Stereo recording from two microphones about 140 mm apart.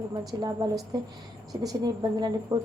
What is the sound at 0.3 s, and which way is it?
A woman's voice, 25° right (ahead or behind).